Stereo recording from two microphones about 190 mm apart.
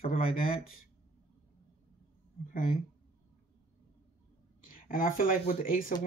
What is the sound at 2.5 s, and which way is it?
Speech, 45° left (ahead or behind).